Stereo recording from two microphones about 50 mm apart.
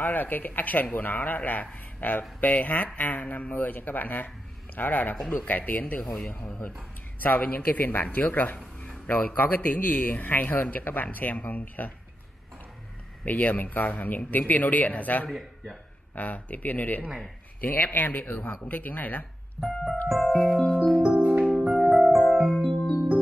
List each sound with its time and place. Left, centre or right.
0.0 s a man's voice: left
13.2 s a man's voice: left
15.2 s speech: centre
16.2 s a man's voice: left
19.6 s music: centre
21.0 s music: right
21.5 s music: centre